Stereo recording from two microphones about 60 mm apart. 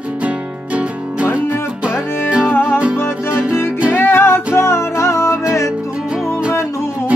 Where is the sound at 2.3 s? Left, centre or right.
Centre.